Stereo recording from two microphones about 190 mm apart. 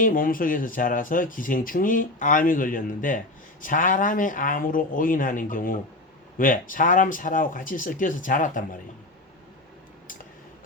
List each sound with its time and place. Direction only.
0.0 s speech: 45° left (ahead or behind)